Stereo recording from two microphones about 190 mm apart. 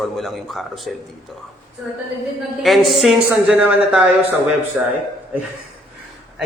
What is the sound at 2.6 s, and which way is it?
Speech, centre (ahead or behind).